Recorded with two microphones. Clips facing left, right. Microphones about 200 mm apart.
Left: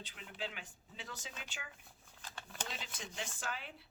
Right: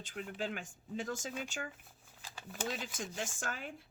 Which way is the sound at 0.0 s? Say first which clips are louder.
Right 6 dB; 45° right (ahead or behind).